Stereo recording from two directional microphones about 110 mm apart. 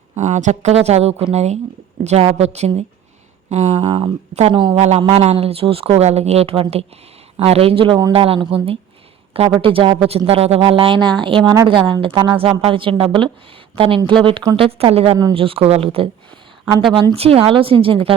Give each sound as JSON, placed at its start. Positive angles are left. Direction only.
{"t": 0.2, "sound": "speech", "side_deg": -90}
{"t": 1.3, "sound": "speech", "side_deg": -85}
{"t": 2.0, "sound": "a woman's voice", "side_deg": -75}
{"t": 3.5, "sound": "speech", "side_deg": -90}
{"t": 4.5, "sound": "speech", "side_deg": -50}
{"t": 4.8, "sound": "speech", "side_deg": -65}
{"t": 14.5, "sound": "speech", "side_deg": -60}
{"t": 16.9, "sound": "speech", "side_deg": -45}
{"t": 17.2, "sound": "speech", "side_deg": -65}